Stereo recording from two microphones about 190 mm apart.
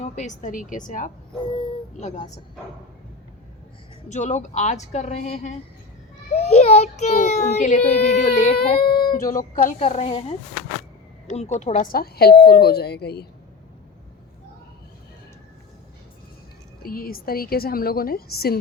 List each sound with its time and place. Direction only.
0.0 s a woman's voice: 40° left (ahead or behind)
1.5 s speech: 25° left (ahead or behind)
2.0 s a child's voice: 40° left (ahead or behind)
4.1 s a child's voice: 40° left (ahead or behind)
8.9 s a sound: 20° left (ahead or behind)
9.2 s a woman's voice: 45° left (ahead or behind)
9.7 s a child's voice: 30° left (ahead or behind); by 13.2 s 60° left (ahead or behind)
16.8 s a woman's voice: 50° left (ahead or behind)